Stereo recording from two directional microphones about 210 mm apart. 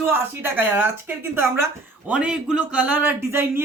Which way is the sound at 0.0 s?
10° right (ahead or behind).